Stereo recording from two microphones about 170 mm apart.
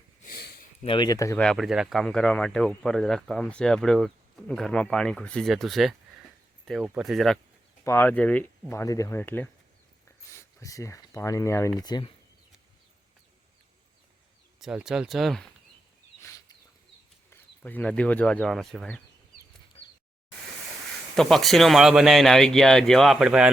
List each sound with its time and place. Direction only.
0.3 s a sound: 60° left (ahead or behind)
0.9 s speech: 25° left (ahead or behind)
1.4 s speech: centre (ahead or behind)
7.9 s speech: 10° left (ahead or behind)
14.6 s speech: 5° right (ahead or behind)
16.2 s bird: 20° left (ahead or behind)
17.2 s speech: 10° left (ahead or behind)
21.2 s speech: centre (ahead or behind)